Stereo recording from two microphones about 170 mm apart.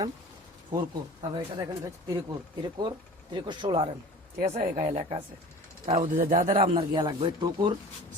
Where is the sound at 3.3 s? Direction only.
25° right (ahead or behind).